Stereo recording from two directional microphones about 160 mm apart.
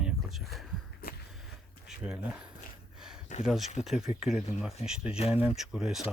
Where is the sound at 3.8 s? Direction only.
5° right (ahead or behind).